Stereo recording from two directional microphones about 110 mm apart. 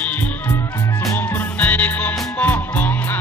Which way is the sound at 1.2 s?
20° left (ahead or behind).